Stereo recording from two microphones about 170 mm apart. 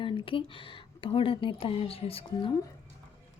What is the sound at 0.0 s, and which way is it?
Speech, 30° left (ahead or behind).